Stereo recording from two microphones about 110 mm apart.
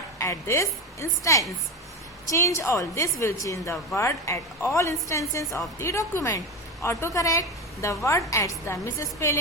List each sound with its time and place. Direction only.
0.2 s a woman's voice: 25° left (ahead or behind)